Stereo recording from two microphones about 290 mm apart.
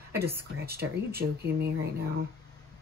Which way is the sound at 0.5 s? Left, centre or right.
Right.